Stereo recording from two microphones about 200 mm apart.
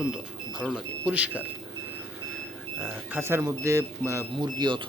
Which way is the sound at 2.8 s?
10° right (ahead or behind).